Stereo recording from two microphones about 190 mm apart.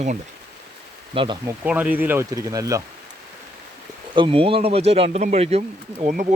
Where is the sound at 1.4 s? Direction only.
10° right (ahead or behind).